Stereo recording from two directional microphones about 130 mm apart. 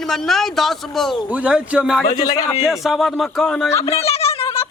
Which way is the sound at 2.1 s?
30° left (ahead or behind).